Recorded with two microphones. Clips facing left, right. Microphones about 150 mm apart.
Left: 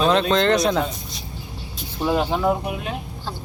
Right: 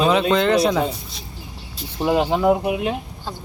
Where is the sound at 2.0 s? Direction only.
15° right (ahead or behind).